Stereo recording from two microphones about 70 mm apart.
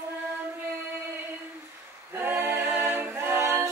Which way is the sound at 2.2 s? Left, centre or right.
Right.